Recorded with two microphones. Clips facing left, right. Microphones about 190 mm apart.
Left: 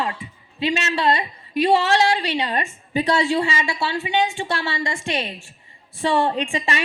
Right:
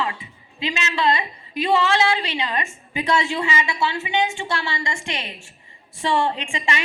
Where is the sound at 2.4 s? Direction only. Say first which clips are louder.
Left 2 dB; 35° left (ahead or behind).